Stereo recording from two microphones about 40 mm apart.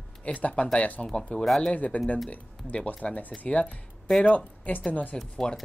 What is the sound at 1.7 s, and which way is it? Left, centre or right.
Speech, left.